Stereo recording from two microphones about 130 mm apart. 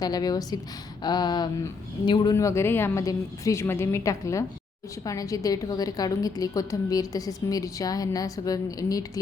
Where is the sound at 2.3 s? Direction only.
25° left (ahead or behind).